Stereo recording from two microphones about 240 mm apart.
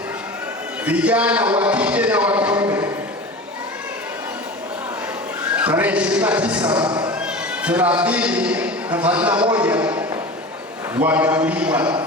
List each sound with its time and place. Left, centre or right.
0.9 s speech: centre
5.5 s speech: centre
6.8 s speech: centre
7.3 s a man's voice: centre